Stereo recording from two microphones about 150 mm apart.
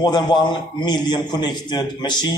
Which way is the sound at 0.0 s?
30° left (ahead or behind).